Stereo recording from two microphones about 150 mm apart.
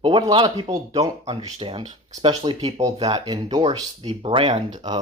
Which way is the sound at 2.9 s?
40° right (ahead or behind).